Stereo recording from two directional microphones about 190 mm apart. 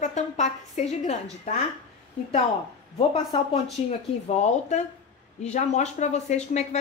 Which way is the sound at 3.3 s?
25° left (ahead or behind).